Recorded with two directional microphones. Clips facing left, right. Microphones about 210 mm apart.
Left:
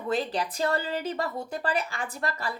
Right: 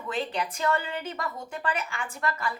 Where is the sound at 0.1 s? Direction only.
35° left (ahead or behind).